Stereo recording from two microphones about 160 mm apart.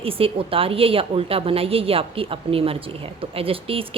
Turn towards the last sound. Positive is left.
turn(degrees=-35)  # may be behind; listen again after turning